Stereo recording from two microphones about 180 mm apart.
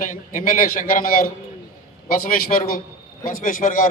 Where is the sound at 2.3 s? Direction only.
55° left (ahead or behind).